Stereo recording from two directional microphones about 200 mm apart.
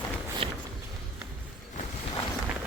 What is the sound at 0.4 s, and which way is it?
Walk, 30° right (ahead or behind).